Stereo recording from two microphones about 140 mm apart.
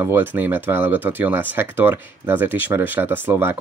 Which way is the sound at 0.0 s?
15° right (ahead or behind).